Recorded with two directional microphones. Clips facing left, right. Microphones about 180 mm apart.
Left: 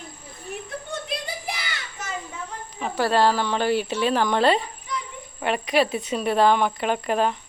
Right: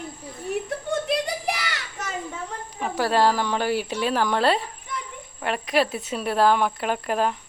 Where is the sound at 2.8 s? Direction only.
10° right (ahead or behind).